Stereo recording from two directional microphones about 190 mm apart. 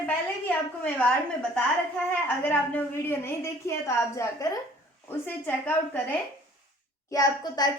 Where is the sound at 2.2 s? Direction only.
10° left (ahead or behind).